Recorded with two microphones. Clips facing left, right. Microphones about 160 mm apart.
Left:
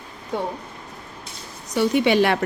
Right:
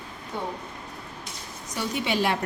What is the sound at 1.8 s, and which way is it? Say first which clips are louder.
Speech: left 9 dB; 70° left (ahead or behind).